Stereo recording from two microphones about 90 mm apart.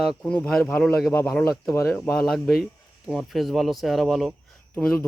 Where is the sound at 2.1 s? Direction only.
5° left (ahead or behind).